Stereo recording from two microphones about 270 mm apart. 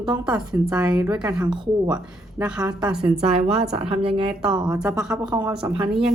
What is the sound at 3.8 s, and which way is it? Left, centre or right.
Speech, centre.